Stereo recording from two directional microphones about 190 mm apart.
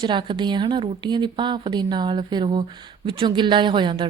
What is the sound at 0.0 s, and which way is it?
Speech, 25° right (ahead or behind).